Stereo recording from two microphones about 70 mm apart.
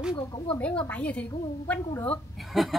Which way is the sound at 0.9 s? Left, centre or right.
Centre.